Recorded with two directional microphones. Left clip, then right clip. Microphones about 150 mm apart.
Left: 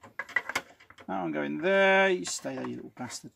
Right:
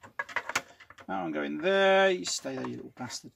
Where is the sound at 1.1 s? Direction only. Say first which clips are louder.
Left 1 dB; 20° left (ahead or behind).